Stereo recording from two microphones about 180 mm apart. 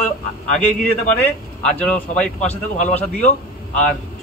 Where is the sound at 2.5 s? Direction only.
40° left (ahead or behind).